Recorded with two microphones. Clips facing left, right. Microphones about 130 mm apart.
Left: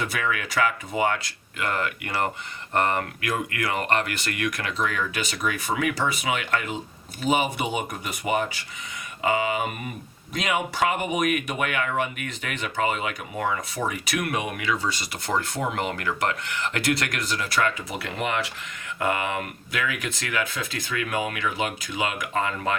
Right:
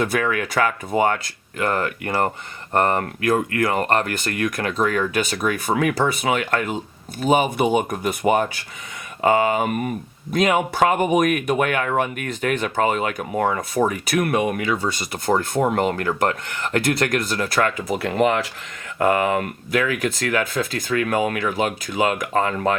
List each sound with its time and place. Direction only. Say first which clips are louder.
0.0 s speech: right 6 dB; 45° right (ahead or behind)